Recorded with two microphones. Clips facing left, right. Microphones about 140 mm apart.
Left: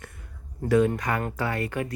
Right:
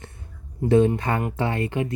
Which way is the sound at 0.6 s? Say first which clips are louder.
Right 3 dB; 30° right (ahead or behind).